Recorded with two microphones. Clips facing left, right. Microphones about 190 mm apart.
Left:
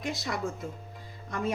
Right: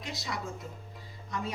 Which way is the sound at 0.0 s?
50° left (ahead or behind).